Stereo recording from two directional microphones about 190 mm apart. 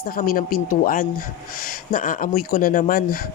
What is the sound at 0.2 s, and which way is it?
Speech, 50° left (ahead or behind).